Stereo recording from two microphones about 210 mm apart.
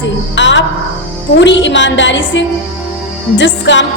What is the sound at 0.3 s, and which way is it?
Music, 60° left (ahead or behind).